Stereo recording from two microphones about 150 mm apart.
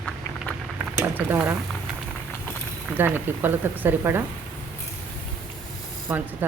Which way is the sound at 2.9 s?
15° right (ahead or behind).